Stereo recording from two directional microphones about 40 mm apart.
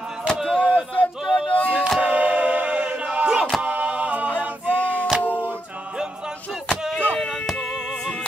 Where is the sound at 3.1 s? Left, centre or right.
Right.